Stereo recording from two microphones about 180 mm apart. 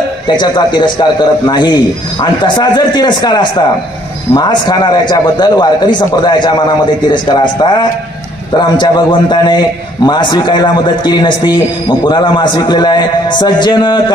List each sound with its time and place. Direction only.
0.4 s a man's voice: 25° left (ahead or behind)